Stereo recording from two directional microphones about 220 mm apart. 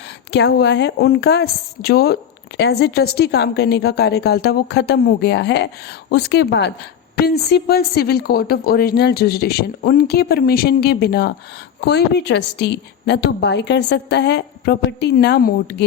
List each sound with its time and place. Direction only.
0.3 s speech: 50° left (ahead or behind)